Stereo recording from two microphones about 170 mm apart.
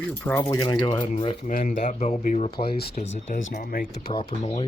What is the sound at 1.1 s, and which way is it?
Speech, 50° left (ahead or behind).